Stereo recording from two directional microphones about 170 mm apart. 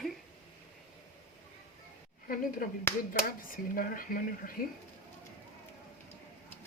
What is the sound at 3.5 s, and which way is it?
Speech, 55° left (ahead or behind).